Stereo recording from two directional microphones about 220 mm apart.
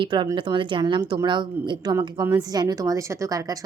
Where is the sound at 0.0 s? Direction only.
20° right (ahead or behind).